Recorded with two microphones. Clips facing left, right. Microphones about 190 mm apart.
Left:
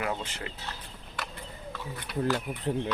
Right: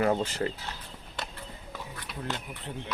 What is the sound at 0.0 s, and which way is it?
Speech, 40° right (ahead or behind).